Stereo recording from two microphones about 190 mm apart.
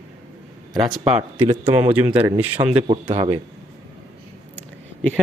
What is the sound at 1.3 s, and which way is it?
Speech, 35° right (ahead or behind).